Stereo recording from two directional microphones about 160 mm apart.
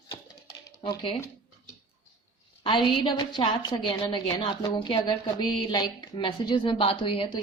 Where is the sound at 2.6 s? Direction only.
30° left (ahead or behind).